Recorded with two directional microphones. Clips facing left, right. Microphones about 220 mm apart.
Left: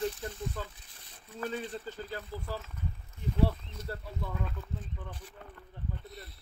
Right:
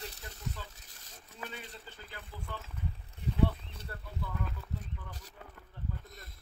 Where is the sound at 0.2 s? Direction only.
45° left (ahead or behind).